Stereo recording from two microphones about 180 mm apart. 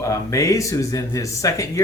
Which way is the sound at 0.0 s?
15° left (ahead or behind).